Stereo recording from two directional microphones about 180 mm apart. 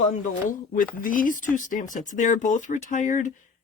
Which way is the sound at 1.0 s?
50° left (ahead or behind).